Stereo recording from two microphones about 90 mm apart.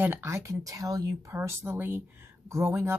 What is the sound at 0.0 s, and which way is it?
Speech, 25° right (ahead or behind).